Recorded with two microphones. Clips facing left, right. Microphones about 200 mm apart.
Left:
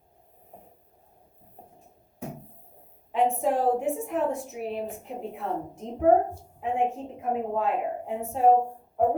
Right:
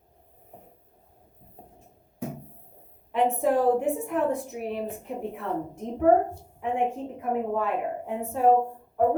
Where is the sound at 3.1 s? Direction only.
60° right (ahead or behind).